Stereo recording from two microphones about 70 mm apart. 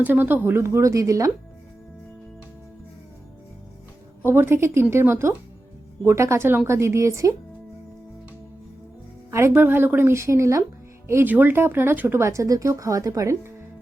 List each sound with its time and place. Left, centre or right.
0.0 s speech: right
4.2 s a woman's voice: right
9.3 s a woman's voice: right
11.3 s speech: right